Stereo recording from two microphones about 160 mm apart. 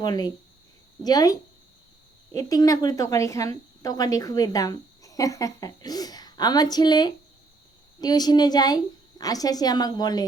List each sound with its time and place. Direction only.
0.0 s speech: 25° left (ahead or behind)